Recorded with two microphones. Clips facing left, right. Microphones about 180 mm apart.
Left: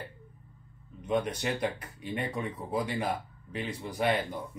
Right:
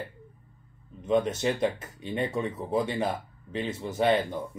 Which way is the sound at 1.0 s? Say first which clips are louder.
Right 5 dB; 25° right (ahead or behind).